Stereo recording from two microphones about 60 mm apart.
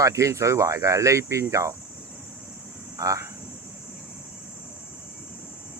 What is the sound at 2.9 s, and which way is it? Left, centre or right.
Speech, right.